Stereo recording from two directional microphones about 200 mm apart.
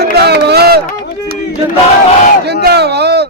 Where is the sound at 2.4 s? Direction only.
55° right (ahead or behind).